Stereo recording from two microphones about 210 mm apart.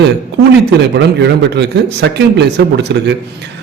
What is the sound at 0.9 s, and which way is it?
A man's voice, 55° right (ahead or behind).